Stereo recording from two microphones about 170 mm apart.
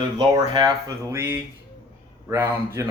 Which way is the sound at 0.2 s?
25° right (ahead or behind).